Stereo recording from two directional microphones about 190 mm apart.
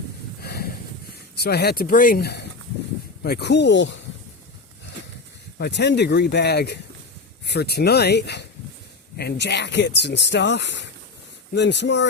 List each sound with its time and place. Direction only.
0.4 s a sound: 55° left (ahead or behind)
1.4 s speech: 55° left (ahead or behind)
5.5 s speech: 60° left (ahead or behind)